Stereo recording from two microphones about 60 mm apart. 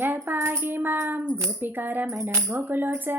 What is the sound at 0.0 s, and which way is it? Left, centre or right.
Music, right.